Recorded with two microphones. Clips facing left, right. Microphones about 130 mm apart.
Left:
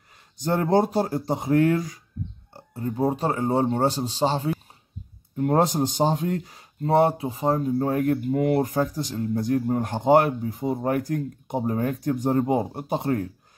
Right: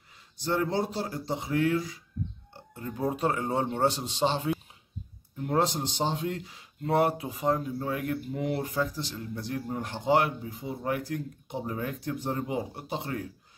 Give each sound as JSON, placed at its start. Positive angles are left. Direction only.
{"t": 0.4, "sound": "speech", "side_deg": 45}
{"t": 2.5, "sound": "a man's voice", "side_deg": 35}
{"t": 5.4, "sound": "speech", "side_deg": 50}
{"t": 6.9, "sound": "speech", "side_deg": 25}